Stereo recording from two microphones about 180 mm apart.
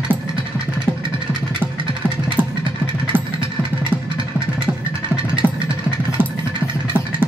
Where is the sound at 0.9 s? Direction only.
10° right (ahead or behind).